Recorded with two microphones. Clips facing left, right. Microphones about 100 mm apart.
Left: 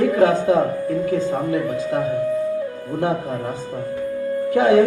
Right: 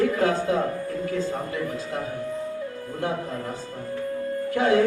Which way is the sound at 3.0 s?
20° left (ahead or behind).